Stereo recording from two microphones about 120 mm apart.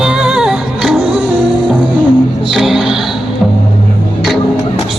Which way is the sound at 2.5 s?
5° right (ahead or behind).